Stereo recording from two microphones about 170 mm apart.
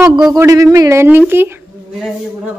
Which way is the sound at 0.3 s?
20° right (ahead or behind).